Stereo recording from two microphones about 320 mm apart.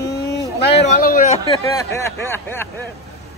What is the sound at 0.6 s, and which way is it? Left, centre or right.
Speech, left.